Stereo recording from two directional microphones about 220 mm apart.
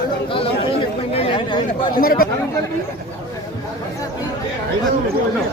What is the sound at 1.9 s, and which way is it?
Speech, 40° left (ahead or behind).